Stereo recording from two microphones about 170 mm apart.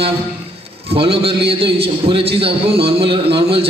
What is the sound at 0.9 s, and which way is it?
A man's voice, 35° right (ahead or behind).